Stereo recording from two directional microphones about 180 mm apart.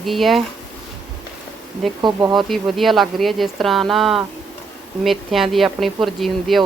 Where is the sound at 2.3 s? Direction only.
Centre (ahead or behind).